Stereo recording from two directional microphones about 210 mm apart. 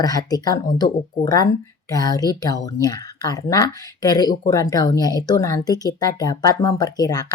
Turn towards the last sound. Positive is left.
turn(degrees=20)  # may be behind; listen again after turning